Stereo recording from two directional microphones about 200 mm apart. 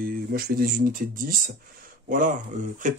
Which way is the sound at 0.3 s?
45° right (ahead or behind).